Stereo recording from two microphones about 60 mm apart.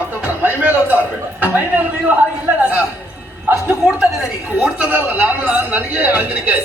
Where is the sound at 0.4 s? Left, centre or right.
Right.